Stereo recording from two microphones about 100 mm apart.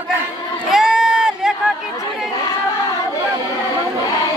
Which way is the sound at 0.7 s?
5° right (ahead or behind).